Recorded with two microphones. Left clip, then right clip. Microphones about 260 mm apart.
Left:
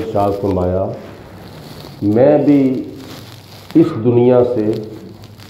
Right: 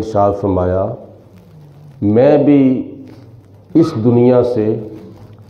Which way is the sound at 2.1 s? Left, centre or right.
Right.